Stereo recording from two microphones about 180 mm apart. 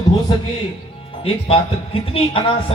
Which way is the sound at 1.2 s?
30° left (ahead or behind).